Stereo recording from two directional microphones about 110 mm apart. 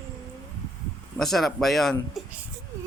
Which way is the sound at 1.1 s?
Centre (ahead or behind).